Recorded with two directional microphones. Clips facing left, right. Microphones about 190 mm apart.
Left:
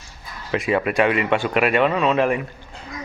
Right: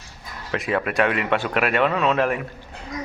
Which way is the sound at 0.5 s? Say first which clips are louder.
Left 3 dB; centre (ahead or behind).